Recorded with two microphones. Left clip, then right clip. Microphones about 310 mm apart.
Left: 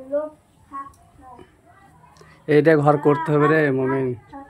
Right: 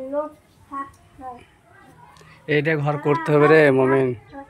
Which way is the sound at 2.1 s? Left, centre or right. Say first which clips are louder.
Left 4 dB; centre.